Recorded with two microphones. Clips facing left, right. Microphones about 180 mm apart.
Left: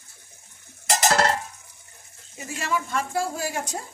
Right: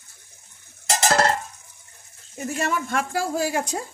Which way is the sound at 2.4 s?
55° right (ahead or behind).